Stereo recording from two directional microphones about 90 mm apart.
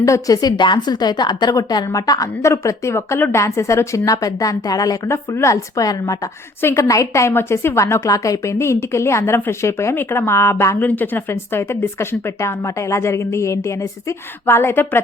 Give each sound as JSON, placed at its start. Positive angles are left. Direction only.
{"t": 0.0, "sound": "a woman's voice", "side_deg": 40}
{"t": 6.6, "sound": "a woman's voice", "side_deg": 30}